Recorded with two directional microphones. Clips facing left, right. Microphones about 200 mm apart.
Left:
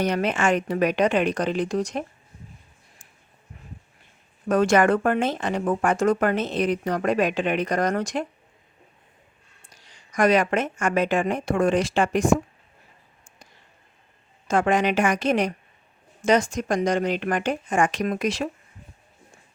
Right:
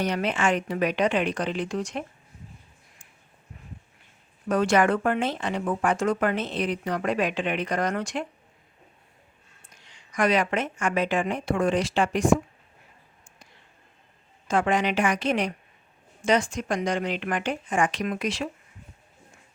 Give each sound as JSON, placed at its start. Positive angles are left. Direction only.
{"t": 0.0, "sound": "speech", "side_deg": 45}
{"t": 4.4, "sound": "speech", "side_deg": 45}
{"t": 9.7, "sound": "speech", "side_deg": 40}
{"t": 14.4, "sound": "speech", "side_deg": 45}